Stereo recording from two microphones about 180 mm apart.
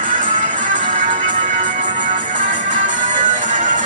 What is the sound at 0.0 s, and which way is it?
Music, 45° right (ahead or behind).